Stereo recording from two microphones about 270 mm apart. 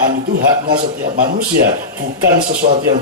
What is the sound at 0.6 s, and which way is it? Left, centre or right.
A man's voice, right.